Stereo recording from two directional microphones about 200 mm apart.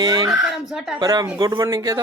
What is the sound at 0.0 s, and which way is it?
Speech, 20° right (ahead or behind).